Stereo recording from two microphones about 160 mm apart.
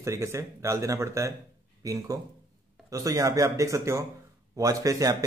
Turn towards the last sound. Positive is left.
turn(degrees=-20)  # may be behind; listen again after turning